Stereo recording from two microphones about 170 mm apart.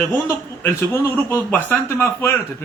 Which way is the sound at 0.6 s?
15° left (ahead or behind).